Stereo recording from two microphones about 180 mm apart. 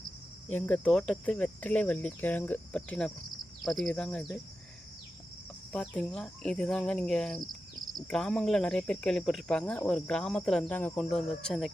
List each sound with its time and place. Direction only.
0.5 s cricket: 10° left (ahead or behind)
3.6 s speech: centre (ahead or behind)
5.7 s speech: 5° left (ahead or behind)
7.4 s cricket: 20° right (ahead or behind)
7.9 s speech: 5° left (ahead or behind)